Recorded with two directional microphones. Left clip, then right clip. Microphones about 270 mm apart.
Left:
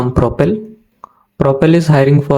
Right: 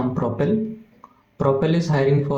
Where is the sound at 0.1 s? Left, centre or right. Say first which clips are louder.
Left 9 dB; left.